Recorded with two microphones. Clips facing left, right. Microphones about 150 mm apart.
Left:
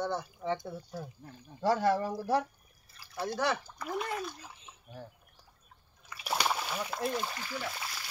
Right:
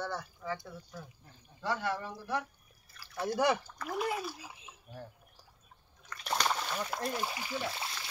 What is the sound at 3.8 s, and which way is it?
Speech, 5° right (ahead or behind).